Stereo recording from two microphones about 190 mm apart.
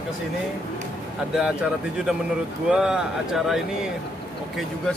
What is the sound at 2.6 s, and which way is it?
Speech, 5° right (ahead or behind).